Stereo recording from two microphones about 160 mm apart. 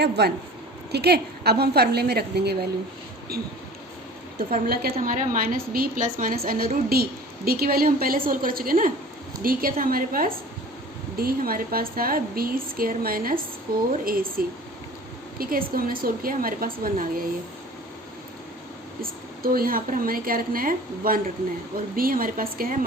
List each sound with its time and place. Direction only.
0.0 s a woman's voice: 90° right
3.3 s a woman's voice: 75° right (ahead or behind)
4.4 s a woman's voice: 65° right (ahead or behind)
19.0 s a woman's voice: 65° right (ahead or behind)